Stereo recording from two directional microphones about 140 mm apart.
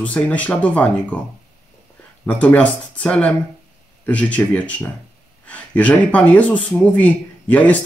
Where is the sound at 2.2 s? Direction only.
10° left (ahead or behind).